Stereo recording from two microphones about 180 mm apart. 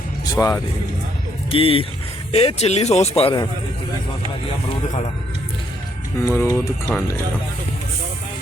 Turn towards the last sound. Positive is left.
turn(degrees=10)  # may be behind; listen again after turning